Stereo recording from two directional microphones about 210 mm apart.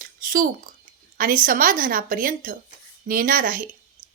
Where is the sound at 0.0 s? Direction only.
40° right (ahead or behind).